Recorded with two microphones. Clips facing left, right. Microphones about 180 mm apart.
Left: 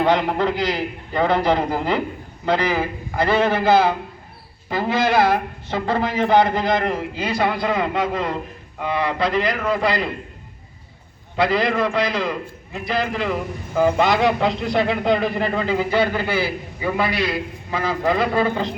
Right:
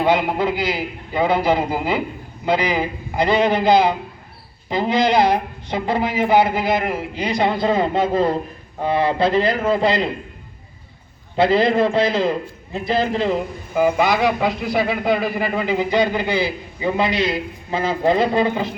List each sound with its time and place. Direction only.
0.0 s a man's voice: 10° right (ahead or behind)
11.3 s a man's voice: 25° right (ahead or behind)
13.7 s a man's voice: 10° right (ahead or behind)